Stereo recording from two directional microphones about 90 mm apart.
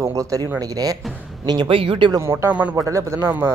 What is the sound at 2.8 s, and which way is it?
Speech, 35° right (ahead or behind).